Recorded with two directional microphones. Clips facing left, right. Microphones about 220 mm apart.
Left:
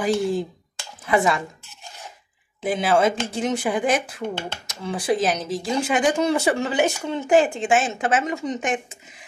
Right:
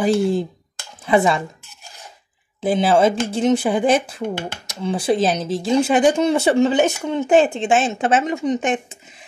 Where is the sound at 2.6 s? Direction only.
30° right (ahead or behind).